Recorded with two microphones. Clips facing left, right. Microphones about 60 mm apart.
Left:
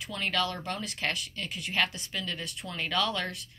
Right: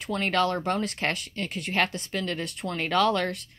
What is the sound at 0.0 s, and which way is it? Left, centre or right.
Speech, right.